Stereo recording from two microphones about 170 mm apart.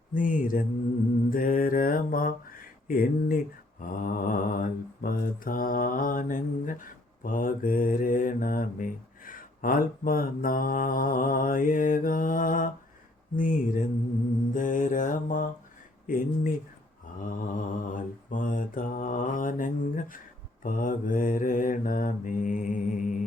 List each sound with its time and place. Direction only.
0.1 s mantra: 50° left (ahead or behind)
17.5 s mantra: 50° left (ahead or behind)